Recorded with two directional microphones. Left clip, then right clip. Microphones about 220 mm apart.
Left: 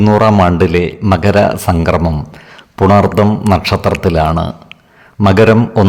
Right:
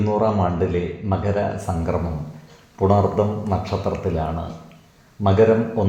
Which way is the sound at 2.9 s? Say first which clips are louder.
Left 9 dB; 45° left (ahead or behind).